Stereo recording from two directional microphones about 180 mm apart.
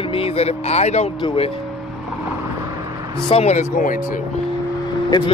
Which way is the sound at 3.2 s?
35° left (ahead or behind).